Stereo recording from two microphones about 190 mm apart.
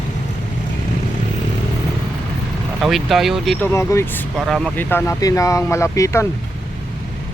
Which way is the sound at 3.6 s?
15° left (ahead or behind).